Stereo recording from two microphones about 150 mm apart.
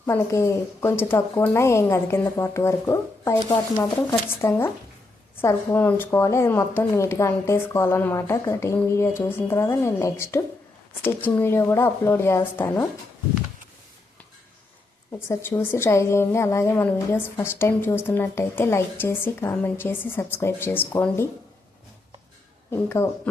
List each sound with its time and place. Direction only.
0.0 s speech: 15° left (ahead or behind)
15.1 s speech: 15° left (ahead or behind)
22.7 s speech: 15° left (ahead or behind)